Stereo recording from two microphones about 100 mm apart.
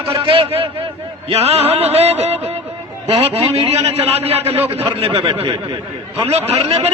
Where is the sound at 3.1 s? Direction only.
75° right (ahead or behind).